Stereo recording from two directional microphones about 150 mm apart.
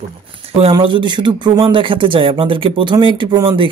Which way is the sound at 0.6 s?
35° right (ahead or behind).